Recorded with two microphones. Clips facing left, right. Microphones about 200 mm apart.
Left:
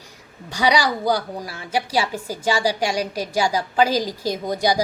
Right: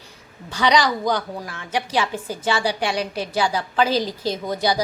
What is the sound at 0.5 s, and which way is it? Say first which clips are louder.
A woman's voice: right 1 dB; 10° left (ahead or behind).